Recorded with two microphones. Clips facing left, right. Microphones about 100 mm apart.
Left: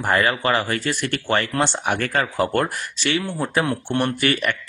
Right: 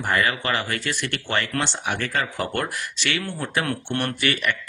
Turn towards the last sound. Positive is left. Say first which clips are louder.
# left 3 dB
turn(degrees=45)  # may be behind; listen again after turning